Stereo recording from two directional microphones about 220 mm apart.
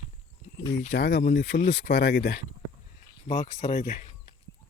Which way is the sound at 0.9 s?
45° left (ahead or behind).